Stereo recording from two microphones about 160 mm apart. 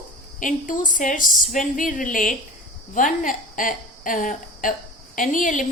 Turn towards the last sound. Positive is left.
turn(degrees=55)  # may be behind; listen again after turning